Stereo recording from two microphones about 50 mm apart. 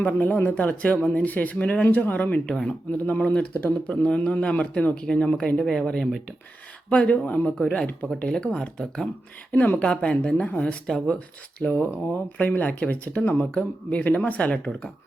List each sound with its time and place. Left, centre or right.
0.0 s speech: left; by 8.7 s centre
9.5 s speech: left
10.8 s speech: centre
11.6 s speech: left